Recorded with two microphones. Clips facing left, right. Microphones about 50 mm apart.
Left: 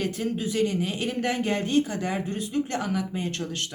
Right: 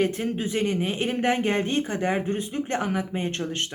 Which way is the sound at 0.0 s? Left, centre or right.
Right.